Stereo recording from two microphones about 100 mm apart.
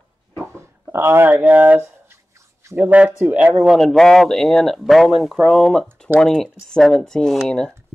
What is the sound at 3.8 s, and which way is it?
Speech, 5° left (ahead or behind).